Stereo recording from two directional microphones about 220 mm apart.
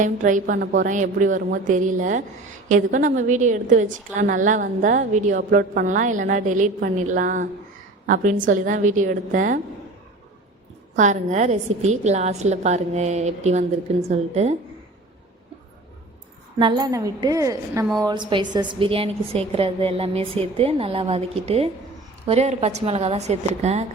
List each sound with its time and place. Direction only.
0.0 s a woman's voice: 35° right (ahead or behind)
10.9 s a woman's voice: 35° right (ahead or behind)
16.6 s a woman's voice: 20° right (ahead or behind)